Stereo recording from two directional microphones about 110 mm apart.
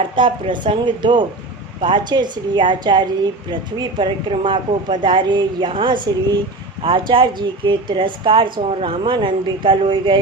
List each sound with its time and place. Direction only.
0.2 s a woman's voice: 45° right (ahead or behind)